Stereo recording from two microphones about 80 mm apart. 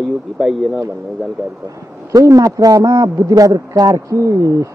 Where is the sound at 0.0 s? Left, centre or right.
Centre.